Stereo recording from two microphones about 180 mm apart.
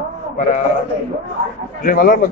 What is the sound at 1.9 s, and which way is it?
Speech, 55° left (ahead or behind).